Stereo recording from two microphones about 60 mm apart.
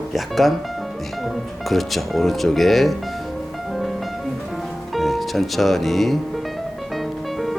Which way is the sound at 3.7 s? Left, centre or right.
Centre.